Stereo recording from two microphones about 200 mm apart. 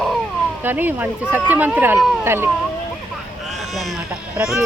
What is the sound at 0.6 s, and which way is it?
Speech, 10° right (ahead or behind).